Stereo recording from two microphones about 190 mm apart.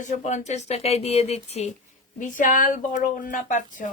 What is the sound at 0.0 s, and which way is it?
Speech, 40° left (ahead or behind).